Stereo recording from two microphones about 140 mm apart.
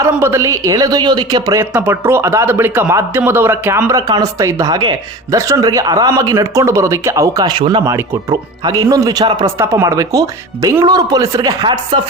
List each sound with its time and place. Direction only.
0.0 s speech: 20° right (ahead or behind)
1.7 s speech: 15° right (ahead or behind); by 9.5 s 30° right (ahead or behind)
9.6 s speech: 20° right (ahead or behind); by 11.9 s 35° right (ahead or behind)